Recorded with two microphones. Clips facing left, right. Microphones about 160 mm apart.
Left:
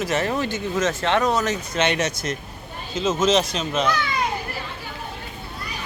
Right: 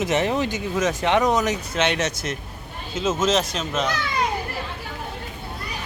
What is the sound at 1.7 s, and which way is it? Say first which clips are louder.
Speech: left 2 dB; centre (ahead or behind).